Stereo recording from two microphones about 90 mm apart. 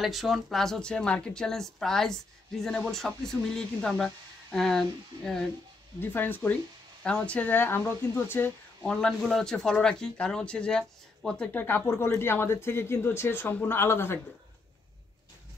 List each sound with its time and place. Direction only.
0.0 s speech: centre (ahead or behind)
5.9 s speech: 20° left (ahead or behind)
8.8 s speech: 10° left (ahead or behind)
11.5 s speech: 20° left (ahead or behind)